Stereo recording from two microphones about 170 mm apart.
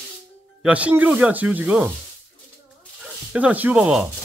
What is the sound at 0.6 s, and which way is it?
Speech, 10° right (ahead or behind).